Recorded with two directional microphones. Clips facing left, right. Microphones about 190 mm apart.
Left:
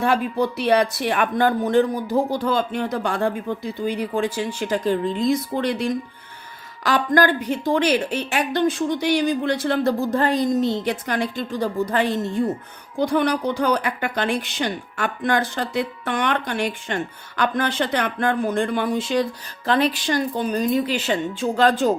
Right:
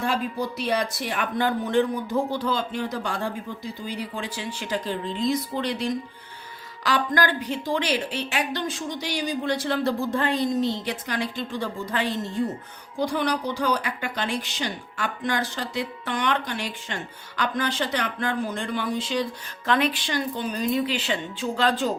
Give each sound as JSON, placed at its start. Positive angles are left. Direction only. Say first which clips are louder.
{"t": 0.0, "sound": "speech", "louder": "left 6 dB", "side_deg": 65}
{"t": 13.0, "sound": "a woman's voice", "louder": "left 5 dB", "side_deg": 55}
{"t": 19.6, "sound": "speech", "louder": "left 4 dB", "side_deg": 35}